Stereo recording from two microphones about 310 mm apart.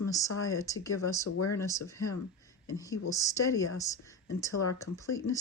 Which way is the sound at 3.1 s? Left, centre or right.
Centre.